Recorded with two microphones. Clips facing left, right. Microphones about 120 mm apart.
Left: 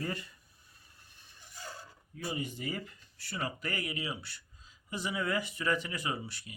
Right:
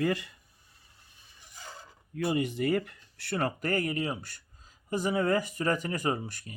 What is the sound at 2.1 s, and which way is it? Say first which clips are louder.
Speech: right 9 dB; 70° right (ahead or behind).